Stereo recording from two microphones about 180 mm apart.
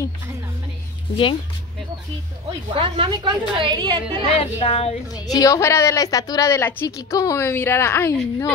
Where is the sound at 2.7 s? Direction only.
30° right (ahead or behind).